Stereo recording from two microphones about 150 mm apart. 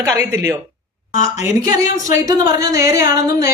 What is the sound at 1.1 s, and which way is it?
Speech, 60° left (ahead or behind).